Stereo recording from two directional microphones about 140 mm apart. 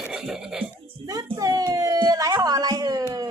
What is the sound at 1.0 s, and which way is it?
A child's voice, 30° right (ahead or behind).